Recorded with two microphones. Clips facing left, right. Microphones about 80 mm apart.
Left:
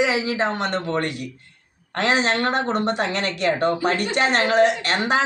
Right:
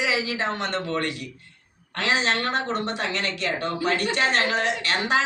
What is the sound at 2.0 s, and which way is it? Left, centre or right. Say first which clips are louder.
Speech: left 4 dB; left.